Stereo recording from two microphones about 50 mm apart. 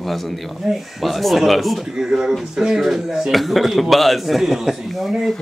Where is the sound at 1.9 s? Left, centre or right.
Centre.